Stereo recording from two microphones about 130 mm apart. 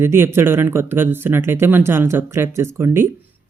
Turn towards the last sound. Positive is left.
turn(degrees=-20)  # may be behind; listen again after turning